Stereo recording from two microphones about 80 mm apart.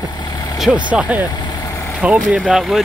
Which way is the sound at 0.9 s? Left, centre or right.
Centre.